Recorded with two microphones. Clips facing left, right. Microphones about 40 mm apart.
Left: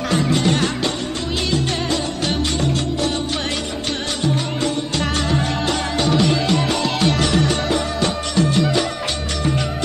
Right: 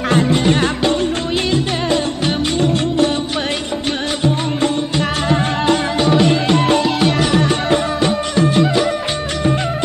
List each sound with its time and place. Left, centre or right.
0.1 s music: right
0.4 s music: right
5.3 s music: right
6.8 s music: centre